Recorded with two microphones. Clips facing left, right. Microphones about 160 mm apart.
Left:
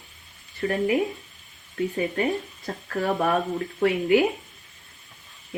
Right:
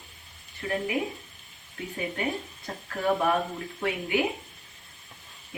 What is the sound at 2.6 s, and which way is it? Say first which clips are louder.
Speech: even; 40° left (ahead or behind).